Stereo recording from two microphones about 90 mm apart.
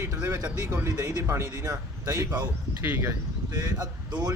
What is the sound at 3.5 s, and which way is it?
Speech, 50° right (ahead or behind).